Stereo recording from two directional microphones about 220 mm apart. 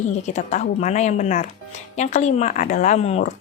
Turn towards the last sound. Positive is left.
turn(degrees=30)  # may be behind; listen again after turning